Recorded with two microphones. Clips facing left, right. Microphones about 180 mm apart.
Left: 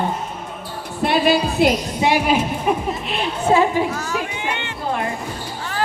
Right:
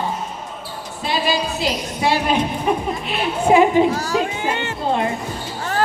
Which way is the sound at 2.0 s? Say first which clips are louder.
Right 2 dB; 15° left (ahead or behind).